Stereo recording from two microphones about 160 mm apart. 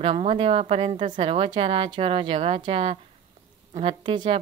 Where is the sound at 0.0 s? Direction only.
35° right (ahead or behind).